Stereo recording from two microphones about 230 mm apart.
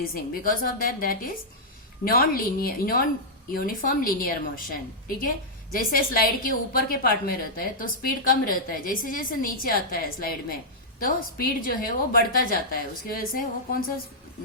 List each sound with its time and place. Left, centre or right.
0.1 s a woman's voice: left
5.7 s a woman's voice: left